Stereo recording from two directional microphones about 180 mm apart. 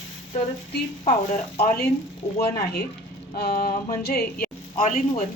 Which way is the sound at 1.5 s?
60° left (ahead or behind).